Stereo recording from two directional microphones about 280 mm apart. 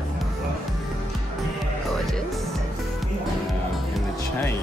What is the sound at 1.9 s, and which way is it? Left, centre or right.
Speech, centre.